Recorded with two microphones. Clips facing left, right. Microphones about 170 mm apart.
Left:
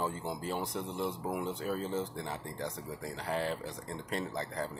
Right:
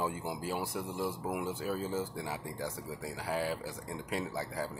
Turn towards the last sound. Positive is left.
turn(degrees=-5)  # may be behind; listen again after turning